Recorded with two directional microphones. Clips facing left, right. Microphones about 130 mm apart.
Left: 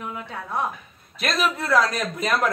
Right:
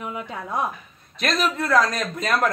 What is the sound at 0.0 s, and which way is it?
Speech, 10° right (ahead or behind).